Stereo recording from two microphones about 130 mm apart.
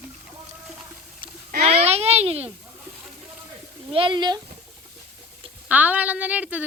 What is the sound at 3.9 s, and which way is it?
Speech, 40° right (ahead or behind).